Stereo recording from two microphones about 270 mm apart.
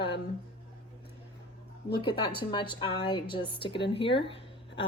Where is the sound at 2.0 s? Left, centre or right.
Centre.